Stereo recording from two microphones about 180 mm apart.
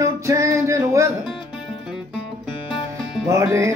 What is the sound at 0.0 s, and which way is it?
Music, 15° right (ahead or behind).